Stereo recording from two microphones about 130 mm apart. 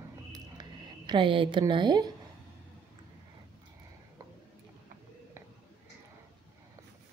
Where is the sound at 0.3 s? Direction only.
30° right (ahead or behind).